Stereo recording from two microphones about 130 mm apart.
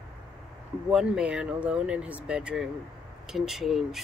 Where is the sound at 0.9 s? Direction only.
5° right (ahead or behind).